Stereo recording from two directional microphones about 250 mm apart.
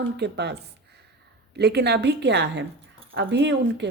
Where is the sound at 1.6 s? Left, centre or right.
Right.